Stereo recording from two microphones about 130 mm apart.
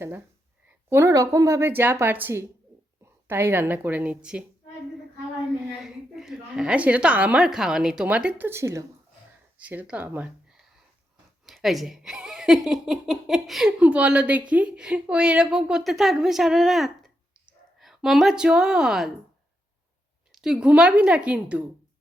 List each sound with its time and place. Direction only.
0.7 s a woman's voice: 20° right (ahead or behind)
5.8 s a woman's voice: 5° right (ahead or behind)
20.3 s a woman's voice: 5° right (ahead or behind)